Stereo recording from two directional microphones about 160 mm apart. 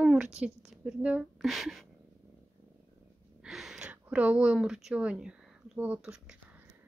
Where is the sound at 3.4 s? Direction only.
5° right (ahead or behind).